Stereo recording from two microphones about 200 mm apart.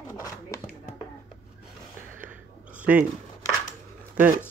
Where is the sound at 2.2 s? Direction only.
5° right (ahead or behind).